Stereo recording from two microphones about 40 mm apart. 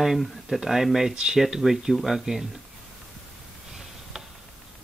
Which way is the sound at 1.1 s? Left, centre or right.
Centre.